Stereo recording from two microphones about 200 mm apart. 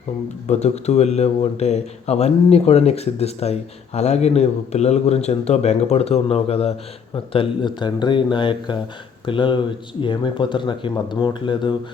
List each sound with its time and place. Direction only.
0.4 s a man's voice: 35° left (ahead or behind)